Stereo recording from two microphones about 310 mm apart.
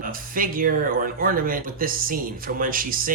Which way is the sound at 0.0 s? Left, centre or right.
Right.